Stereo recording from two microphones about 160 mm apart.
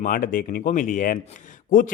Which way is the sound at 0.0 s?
55° left (ahead or behind).